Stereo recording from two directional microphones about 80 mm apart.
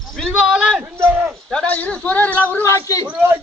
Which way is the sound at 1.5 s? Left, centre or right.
Centre.